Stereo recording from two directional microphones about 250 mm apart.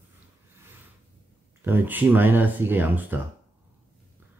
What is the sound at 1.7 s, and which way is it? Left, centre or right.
Speech, centre.